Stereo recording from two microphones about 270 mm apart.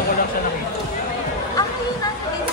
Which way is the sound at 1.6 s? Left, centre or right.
Centre.